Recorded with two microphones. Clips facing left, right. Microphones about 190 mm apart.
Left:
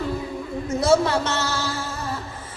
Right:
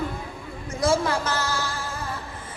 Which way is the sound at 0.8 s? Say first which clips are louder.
Left 4 dB; 25° left (ahead or behind).